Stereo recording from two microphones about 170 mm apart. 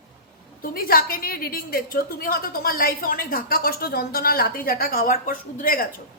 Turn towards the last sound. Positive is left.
turn(degrees=55)  # may be behind; listen again after turning